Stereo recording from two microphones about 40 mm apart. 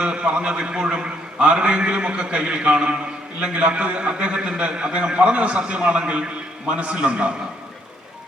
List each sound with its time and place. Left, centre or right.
0.0 s a man's voice: right